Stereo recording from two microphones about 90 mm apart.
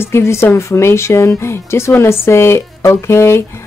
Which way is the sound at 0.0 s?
30° left (ahead or behind).